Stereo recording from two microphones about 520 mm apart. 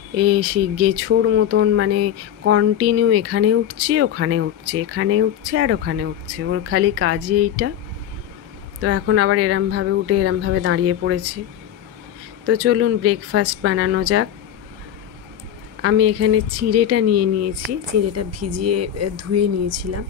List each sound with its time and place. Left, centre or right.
0.1 s speech: right
8.8 s speech: right
12.4 s speech: right
15.8 s speech: right